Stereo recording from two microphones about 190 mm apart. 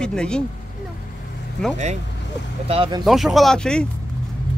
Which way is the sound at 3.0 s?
Centre (ahead or behind).